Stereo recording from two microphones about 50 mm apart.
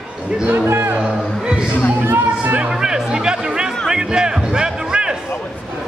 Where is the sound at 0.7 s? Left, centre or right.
Right.